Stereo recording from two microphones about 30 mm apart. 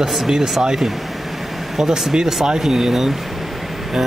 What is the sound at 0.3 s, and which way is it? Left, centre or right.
Speech, right.